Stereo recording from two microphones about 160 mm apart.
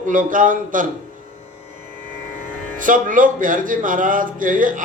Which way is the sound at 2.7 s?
55° right (ahead or behind).